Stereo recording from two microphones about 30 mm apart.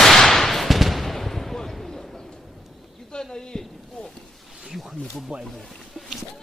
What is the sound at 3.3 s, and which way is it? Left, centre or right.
Speech, left.